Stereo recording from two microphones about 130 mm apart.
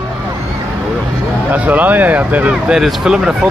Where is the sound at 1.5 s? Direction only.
15° right (ahead or behind).